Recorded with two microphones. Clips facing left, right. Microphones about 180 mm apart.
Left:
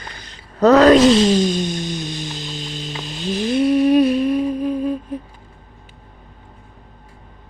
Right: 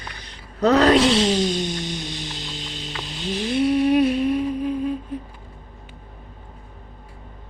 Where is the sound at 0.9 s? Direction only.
45° left (ahead or behind).